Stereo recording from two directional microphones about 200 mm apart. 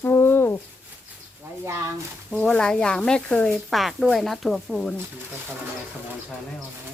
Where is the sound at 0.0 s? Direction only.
10° left (ahead or behind).